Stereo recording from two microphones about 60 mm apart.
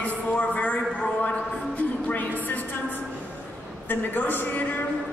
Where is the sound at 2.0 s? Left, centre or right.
Left.